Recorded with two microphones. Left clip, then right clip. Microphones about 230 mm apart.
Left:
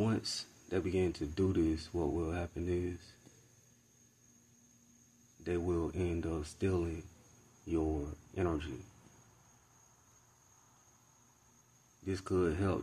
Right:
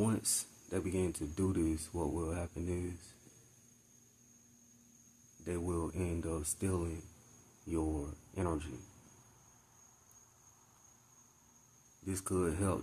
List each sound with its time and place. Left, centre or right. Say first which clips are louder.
0.0 s speech: even; centre
5.4 s speech: left 3 dB; centre
8.4 s speech: left 2 dB; centre
12.0 s speech: left 3 dB; centre